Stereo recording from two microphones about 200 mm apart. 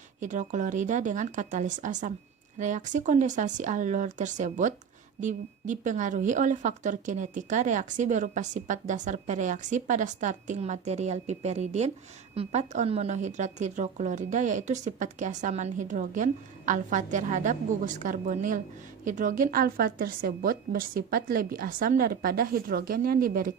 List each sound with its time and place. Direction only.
0.2 s a woman's voice: 40° right (ahead or behind)